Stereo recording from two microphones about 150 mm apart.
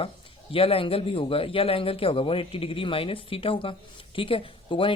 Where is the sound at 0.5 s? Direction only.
40° left (ahead or behind).